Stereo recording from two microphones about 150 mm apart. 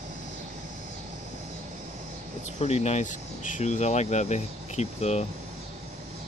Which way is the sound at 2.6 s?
45° left (ahead or behind).